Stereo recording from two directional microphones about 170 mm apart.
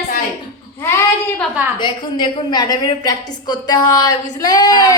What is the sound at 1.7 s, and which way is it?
A woman's voice, 25° left (ahead or behind).